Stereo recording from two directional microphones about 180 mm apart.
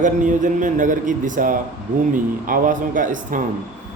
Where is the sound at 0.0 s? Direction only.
45° right (ahead or behind).